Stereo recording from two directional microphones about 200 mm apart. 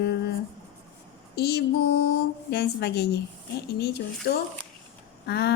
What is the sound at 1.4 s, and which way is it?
A woman's voice, 55° left (ahead or behind).